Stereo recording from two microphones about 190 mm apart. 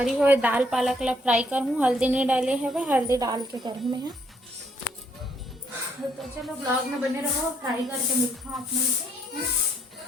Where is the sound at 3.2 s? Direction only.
20° right (ahead or behind).